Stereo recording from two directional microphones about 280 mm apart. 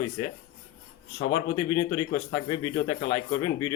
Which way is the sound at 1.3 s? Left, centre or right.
Centre.